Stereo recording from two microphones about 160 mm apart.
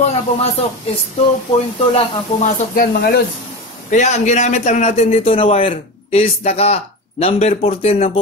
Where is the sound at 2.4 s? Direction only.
65° left (ahead or behind).